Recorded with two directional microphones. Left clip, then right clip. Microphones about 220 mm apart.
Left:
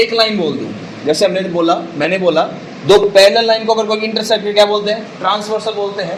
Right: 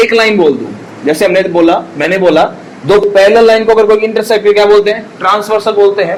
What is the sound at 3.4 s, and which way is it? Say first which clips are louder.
A man's voice: right 7 dB; 30° right (ahead or behind).